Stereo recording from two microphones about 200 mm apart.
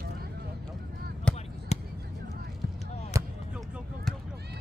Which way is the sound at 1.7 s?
35° left (ahead or behind).